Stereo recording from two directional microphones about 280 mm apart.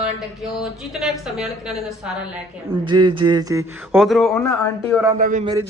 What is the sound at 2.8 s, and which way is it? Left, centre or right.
Speech, right.